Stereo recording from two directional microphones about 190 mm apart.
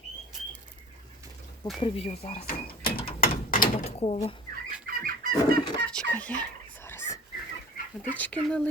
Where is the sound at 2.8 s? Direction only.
50° left (ahead or behind).